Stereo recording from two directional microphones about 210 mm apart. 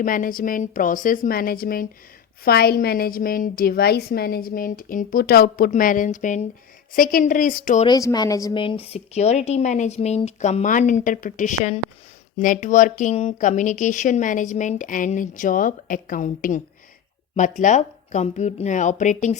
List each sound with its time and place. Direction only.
0.0 s a woman's voice: 40° left (ahead or behind)
7.9 s speech: 15° left (ahead or behind); by 16.6 s 40° left (ahead or behind)
17.6 s speech: 35° left (ahead or behind)